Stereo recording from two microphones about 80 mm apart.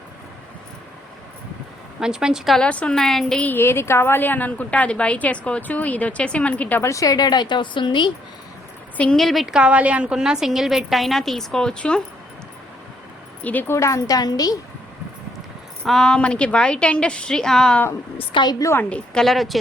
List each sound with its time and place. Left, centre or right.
2.0 s a woman's voice: centre
2.6 s a woman's voice: centre
3.4 s a woman's voice: left
6.8 s speech: left
9.1 s a woman's voice: centre
9.6 s a woman's voice: centre
13.4 s a woman's voice: left
13.7 s a woman's voice: left
15.8 s a woman's voice: centre
18.3 s a woman's voice: left
18.8 s a woman's voice: centre
19.2 s a woman's voice: centre